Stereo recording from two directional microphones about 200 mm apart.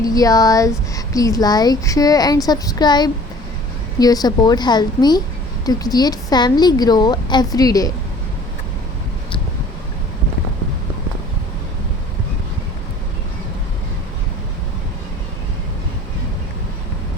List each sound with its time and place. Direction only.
0.0 s a woman's voice: 20° left (ahead or behind)